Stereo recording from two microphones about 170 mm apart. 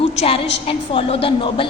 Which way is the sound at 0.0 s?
35° left (ahead or behind).